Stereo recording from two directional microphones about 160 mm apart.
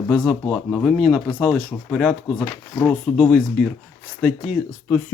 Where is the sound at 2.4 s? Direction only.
10° left (ahead or behind).